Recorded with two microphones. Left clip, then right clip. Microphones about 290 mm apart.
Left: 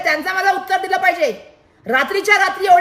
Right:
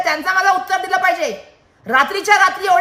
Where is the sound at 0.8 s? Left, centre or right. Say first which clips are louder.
Even; centre.